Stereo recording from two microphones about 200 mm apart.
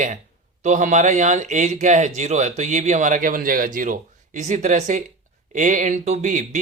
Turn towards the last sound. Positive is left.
turn(degrees=-40)  # may be behind; listen again after turning